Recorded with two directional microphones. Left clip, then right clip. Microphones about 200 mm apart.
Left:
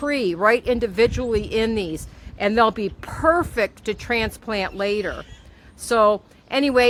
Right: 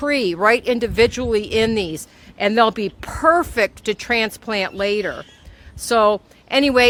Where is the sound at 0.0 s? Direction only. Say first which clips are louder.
Right 2 dB; 45° right (ahead or behind).